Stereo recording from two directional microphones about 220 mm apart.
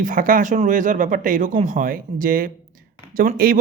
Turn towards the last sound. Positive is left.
turn(degrees=-40)  # may be behind; listen again after turning